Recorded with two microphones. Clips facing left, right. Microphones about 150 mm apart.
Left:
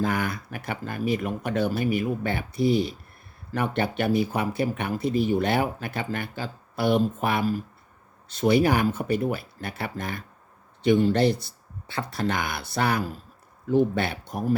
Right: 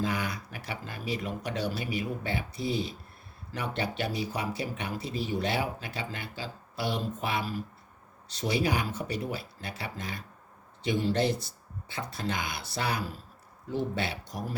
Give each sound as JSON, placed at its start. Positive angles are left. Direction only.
{"t": 0.0, "sound": "speech", "side_deg": 55}